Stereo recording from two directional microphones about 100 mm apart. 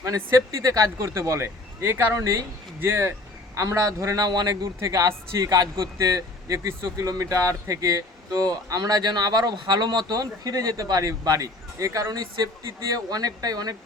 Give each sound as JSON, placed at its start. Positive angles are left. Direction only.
{"t": 0.0, "sound": "speech", "side_deg": -30}